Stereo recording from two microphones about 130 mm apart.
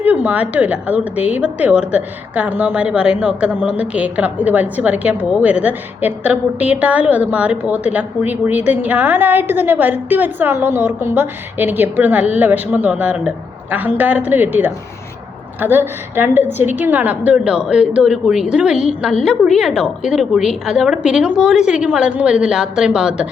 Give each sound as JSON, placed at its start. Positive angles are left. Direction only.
{"t": 0.0, "sound": "a woman's voice", "side_deg": -10}